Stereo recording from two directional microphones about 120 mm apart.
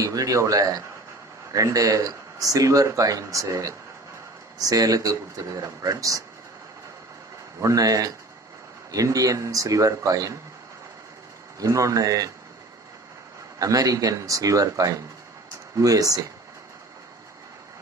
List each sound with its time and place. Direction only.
0.0 s speech: 30° right (ahead or behind)
7.6 s speech: 30° right (ahead or behind)
11.6 s speech: 25° right (ahead or behind)
13.6 s speech: 30° right (ahead or behind)